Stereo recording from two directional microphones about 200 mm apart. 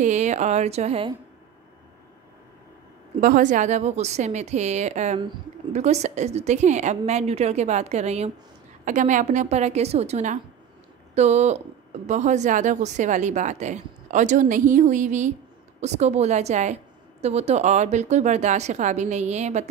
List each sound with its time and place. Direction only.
0.0 s speech: 35° right (ahead or behind)
3.2 s speech: 45° right (ahead or behind)